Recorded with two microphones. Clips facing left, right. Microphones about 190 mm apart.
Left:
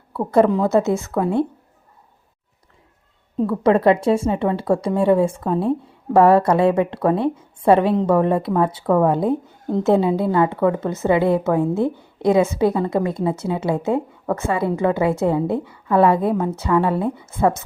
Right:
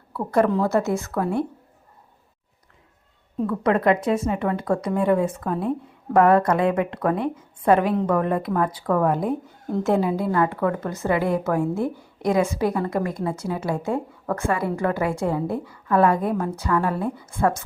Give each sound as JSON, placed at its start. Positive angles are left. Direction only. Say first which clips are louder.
{"t": 0.1, "sound": "a woman's voice", "louder": "left 4 dB", "side_deg": 25}
{"t": 3.3, "sound": "a woman's voice", "louder": "left 5 dB", "side_deg": 30}